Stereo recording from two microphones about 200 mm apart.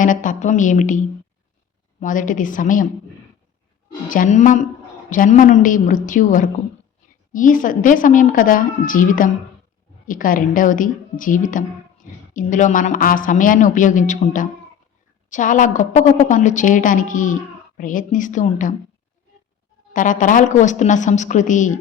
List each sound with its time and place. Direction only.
0.0 s speech: 40° left (ahead or behind)
4.1 s speech: 40° left (ahead or behind)
19.9 s speech: 40° left (ahead or behind)